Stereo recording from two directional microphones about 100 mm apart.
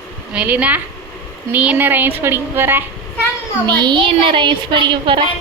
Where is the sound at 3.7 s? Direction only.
45° right (ahead or behind).